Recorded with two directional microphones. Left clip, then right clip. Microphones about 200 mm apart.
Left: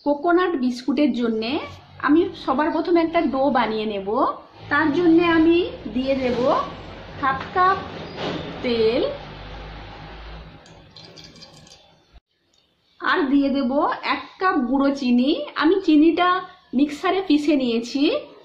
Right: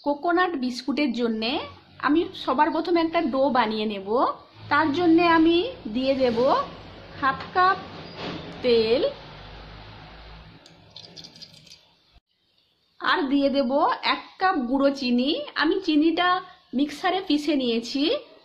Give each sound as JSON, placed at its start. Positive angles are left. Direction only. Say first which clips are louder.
{"t": 0.0, "sound": "a woman's voice", "louder": "left 3 dB", "side_deg": -25}
{"t": 7.2, "sound": "a woman's voice", "louder": "left 2 dB", "side_deg": -45}
{"t": 8.6, "sound": "a woman's voice", "louder": "even", "side_deg": -30}
{"t": 13.0, "sound": "a woman's voice", "louder": "left 2 dB", "side_deg": -35}